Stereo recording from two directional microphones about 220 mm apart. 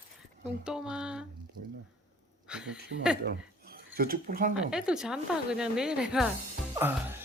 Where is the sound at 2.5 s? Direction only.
5° right (ahead or behind).